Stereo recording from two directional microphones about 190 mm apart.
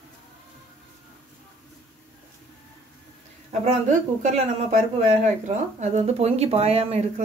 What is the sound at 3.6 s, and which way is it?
Speech, 40° right (ahead or behind).